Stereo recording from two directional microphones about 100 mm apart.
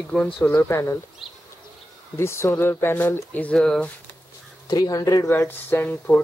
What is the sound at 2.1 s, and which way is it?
Speech, 25° left (ahead or behind).